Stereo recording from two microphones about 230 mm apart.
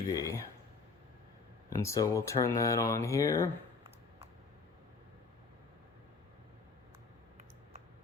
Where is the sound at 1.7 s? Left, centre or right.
Centre.